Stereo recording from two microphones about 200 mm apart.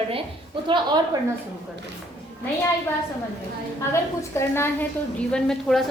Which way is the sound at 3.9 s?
15° left (ahead or behind).